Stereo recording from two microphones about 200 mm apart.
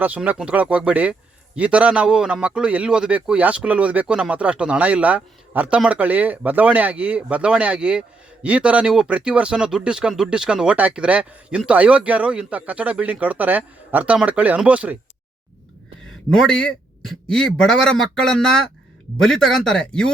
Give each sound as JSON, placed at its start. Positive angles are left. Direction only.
{"t": 0.0, "sound": "a man's voice", "side_deg": -10}
{"t": 16.3, "sound": "a man's voice", "side_deg": 5}